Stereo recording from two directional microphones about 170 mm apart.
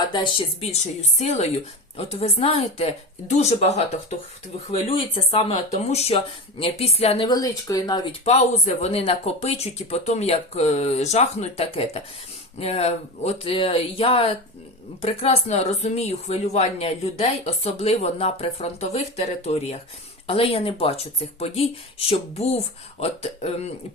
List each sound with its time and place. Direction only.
0.1 s a woman's voice: 30° left (ahead or behind)
4.9 s speech: 35° left (ahead or behind)
8.2 s speech: 40° left (ahead or behind)